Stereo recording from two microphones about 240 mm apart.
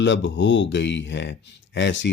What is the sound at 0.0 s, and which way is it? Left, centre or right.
Speech, left.